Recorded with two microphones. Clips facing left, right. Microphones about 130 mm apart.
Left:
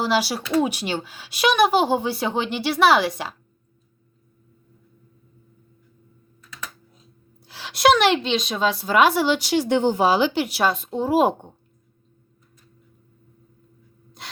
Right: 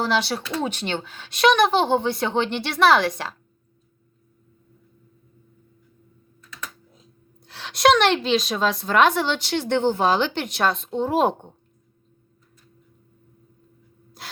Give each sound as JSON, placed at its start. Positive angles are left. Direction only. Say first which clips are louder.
{"t": 0.0, "sound": "a woman's voice", "louder": "left 1 dB", "side_deg": 5}
{"t": 7.4, "sound": "a woman's voice", "louder": "even", "side_deg": 0}
{"t": 14.2, "sound": "gasp", "louder": "even", "side_deg": 0}